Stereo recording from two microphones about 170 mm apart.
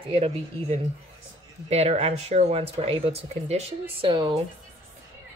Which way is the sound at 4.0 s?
25° right (ahead or behind).